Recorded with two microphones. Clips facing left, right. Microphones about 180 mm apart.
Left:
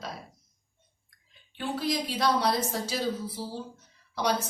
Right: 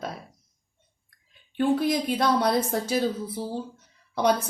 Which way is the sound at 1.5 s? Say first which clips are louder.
Right 7 dB; 55° right (ahead or behind).